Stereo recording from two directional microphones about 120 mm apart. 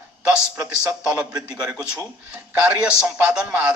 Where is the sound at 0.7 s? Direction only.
5° right (ahead or behind).